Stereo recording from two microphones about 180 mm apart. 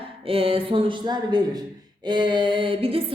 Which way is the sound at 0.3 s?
30° right (ahead or behind).